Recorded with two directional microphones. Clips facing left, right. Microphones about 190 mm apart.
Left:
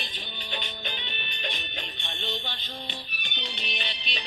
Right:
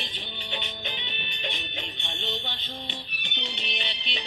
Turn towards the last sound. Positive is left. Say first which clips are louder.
# right 1 dB
turn(degrees=-20)  # may be behind; listen again after turning